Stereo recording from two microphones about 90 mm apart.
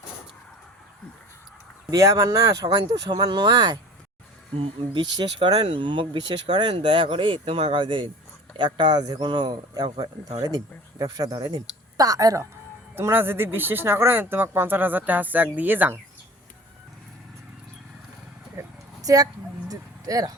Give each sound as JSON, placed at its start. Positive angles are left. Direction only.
{"t": 1.9, "sound": "speech", "side_deg": -40}
{"t": 4.5, "sound": "speech", "side_deg": -90}
{"t": 5.1, "sound": "speech", "side_deg": -60}
{"t": 7.4, "sound": "speech", "side_deg": -90}
{"t": 10.0, "sound": "speech", "side_deg": -45}
{"t": 13.0, "sound": "speech", "side_deg": -25}
{"t": 19.0, "sound": "a sound", "side_deg": -45}